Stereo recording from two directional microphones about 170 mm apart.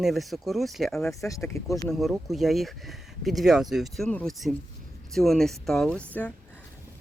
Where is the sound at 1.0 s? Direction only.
15° left (ahead or behind).